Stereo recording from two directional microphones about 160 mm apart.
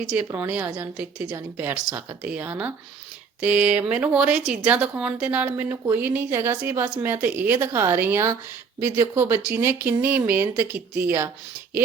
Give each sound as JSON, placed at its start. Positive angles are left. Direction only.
{"t": 0.3, "sound": "speech", "side_deg": -10}